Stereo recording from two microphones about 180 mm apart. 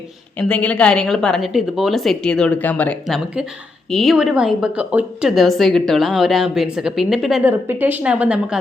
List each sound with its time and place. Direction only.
0.3 s a woman's voice: 5° left (ahead or behind)